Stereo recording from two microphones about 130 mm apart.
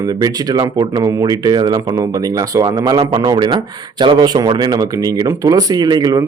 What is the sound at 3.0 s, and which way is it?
Speech, 45° right (ahead or behind).